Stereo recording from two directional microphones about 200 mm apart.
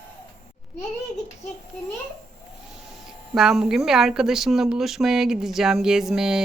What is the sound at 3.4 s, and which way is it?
Speech, centre (ahead or behind).